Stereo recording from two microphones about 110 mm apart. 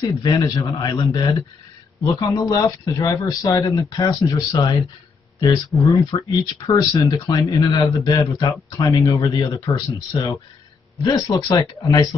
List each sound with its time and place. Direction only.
0.2 s speech: 30° left (ahead or behind)